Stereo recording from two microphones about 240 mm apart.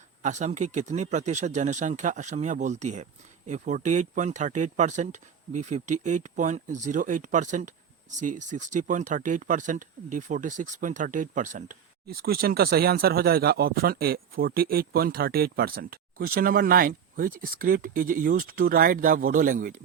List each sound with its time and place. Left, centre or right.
0.2 s speech: right